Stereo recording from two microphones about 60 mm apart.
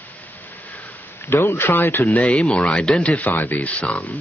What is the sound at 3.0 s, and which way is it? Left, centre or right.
Speech, left.